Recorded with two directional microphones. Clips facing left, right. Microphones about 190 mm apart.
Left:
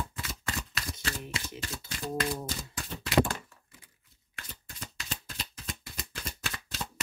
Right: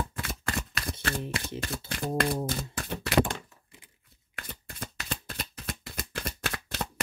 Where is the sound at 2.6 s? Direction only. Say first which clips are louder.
Right 5 dB; 60° right (ahead or behind).